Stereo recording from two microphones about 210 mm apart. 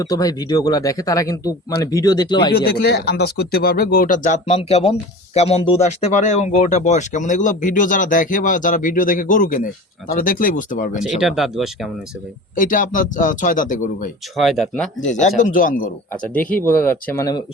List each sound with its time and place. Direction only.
0.0 s speech: 15° left (ahead or behind)
2.5 s speech: 50° left (ahead or behind)
11.2 s speech: centre (ahead or behind)
12.5 s speech: 40° left (ahead or behind)
14.3 s speech: centre (ahead or behind)
15.0 s speech: 35° left (ahead or behind)
16.3 s speech: 5° left (ahead or behind)